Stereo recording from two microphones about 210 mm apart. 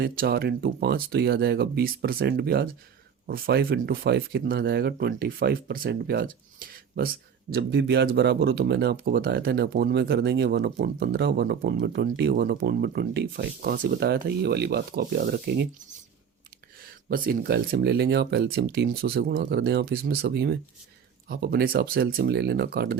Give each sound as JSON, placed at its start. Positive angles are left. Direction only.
{"t": 0.0, "sound": "speech", "side_deg": -45}
{"t": 17.1, "sound": "speech", "side_deg": -45}